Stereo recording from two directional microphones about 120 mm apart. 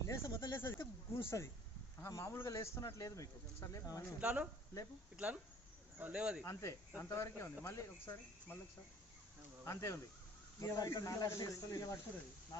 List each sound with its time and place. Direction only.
0.1 s a sound: 30° left (ahead or behind)
2.0 s speech: 25° left (ahead or behind)
4.2 s speech: 10° right (ahead or behind)
6.4 s speech: 25° left (ahead or behind)
9.6 s speech: 25° left (ahead or behind)